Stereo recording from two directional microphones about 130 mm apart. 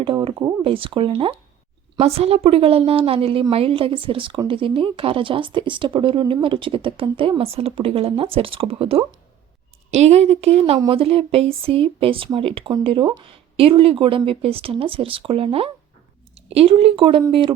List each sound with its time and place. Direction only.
0.0 s speech: 40° right (ahead or behind)
0.6 s a woman's voice: 45° right (ahead or behind)